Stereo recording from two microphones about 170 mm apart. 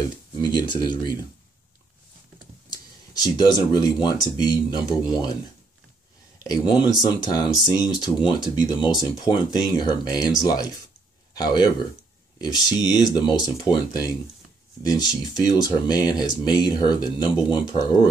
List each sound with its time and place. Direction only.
0.4 s speech: 25° left (ahead or behind)
2.7 s speech: 25° left (ahead or behind)
6.4 s speech: 25° left (ahead or behind)
15.3 s speech: 25° left (ahead or behind)